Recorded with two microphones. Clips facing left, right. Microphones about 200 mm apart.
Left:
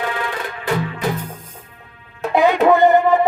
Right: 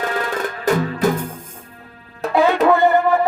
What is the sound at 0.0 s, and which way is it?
Music, 45° right (ahead or behind).